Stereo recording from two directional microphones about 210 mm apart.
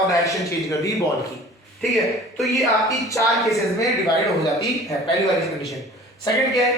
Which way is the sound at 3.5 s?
15° left (ahead or behind).